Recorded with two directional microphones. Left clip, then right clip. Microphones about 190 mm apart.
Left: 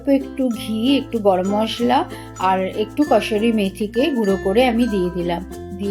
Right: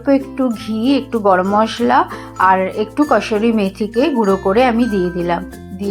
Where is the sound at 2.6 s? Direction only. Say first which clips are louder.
Right 4 dB; 30° right (ahead or behind).